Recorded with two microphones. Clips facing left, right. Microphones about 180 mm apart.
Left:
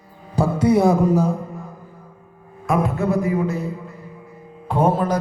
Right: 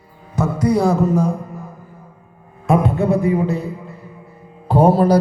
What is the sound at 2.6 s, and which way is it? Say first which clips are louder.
Speech: right 4 dB; 30° right (ahead or behind).